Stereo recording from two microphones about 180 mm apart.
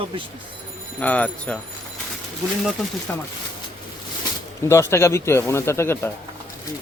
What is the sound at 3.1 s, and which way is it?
Speech, 10° left (ahead or behind).